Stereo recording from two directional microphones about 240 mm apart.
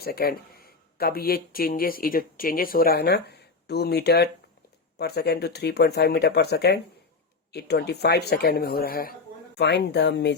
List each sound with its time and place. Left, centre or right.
0.0 s speech: left